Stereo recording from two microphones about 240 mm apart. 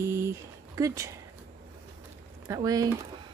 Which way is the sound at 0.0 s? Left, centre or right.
Centre.